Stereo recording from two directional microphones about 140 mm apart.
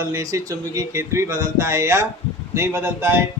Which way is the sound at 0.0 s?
25° right (ahead or behind).